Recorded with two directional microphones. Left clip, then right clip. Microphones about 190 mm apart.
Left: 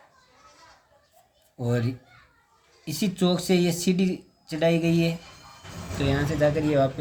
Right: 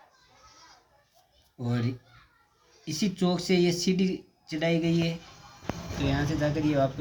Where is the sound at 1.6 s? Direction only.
45° left (ahead or behind).